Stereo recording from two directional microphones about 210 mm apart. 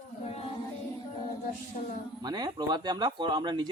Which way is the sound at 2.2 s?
20° right (ahead or behind).